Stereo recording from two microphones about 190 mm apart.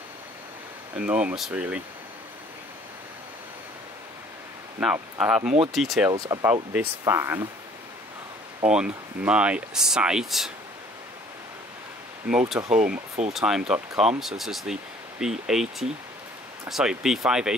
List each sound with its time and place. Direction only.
0.9 s speech: 5° right (ahead or behind)
4.7 s speech: 10° right (ahead or behind)
6.0 s speech: 15° right (ahead or behind)
8.6 s speech: 5° right (ahead or behind)
12.3 s speech: 5° right (ahead or behind)